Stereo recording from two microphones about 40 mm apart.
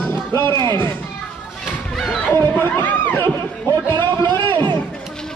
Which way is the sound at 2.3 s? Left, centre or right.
Left.